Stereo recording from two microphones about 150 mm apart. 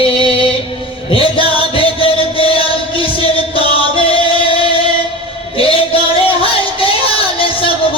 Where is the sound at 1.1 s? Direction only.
35° left (ahead or behind).